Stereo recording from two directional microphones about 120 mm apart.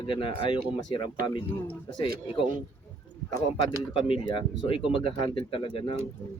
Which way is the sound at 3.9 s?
45° left (ahead or behind).